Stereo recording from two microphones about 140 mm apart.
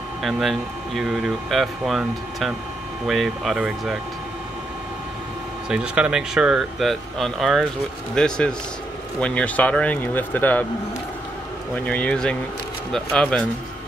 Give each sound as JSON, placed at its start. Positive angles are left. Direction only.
{"t": 0.2, "sound": "speech", "side_deg": 0}
{"t": 5.7, "sound": "speech", "side_deg": -5}
{"t": 11.7, "sound": "speech", "side_deg": 10}